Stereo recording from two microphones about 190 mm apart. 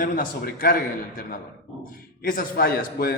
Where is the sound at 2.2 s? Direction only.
50° left (ahead or behind).